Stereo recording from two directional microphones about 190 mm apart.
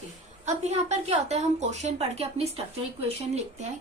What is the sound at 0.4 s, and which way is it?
A woman's voice, 35° right (ahead or behind).